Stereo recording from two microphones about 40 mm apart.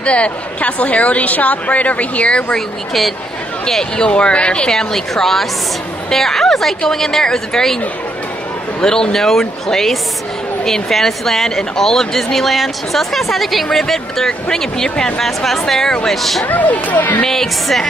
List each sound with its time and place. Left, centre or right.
0.0 s a woman's voice: left
3.6 s a woman's voice: centre
8.8 s a woman's voice: centre
16.4 s speech: left
17.3 s speech: centre